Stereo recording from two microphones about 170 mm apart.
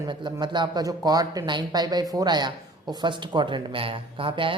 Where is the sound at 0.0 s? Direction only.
25° right (ahead or behind).